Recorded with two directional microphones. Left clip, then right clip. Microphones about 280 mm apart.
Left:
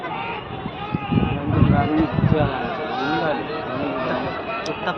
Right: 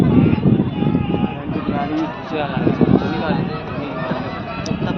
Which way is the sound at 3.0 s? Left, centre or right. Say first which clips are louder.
Left 1 dB; left.